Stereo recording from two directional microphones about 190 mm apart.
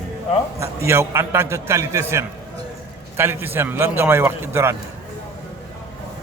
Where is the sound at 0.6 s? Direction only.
15° right (ahead or behind).